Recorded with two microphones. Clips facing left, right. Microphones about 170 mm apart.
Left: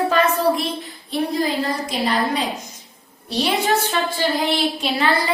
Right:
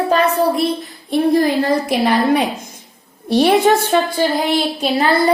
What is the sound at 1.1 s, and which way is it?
A woman's voice, 60° right (ahead or behind).